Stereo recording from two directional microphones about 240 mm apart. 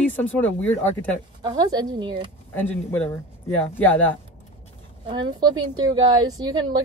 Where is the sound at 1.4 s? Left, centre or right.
Centre.